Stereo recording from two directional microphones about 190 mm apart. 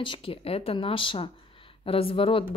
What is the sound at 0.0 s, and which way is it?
Speech, 30° left (ahead or behind).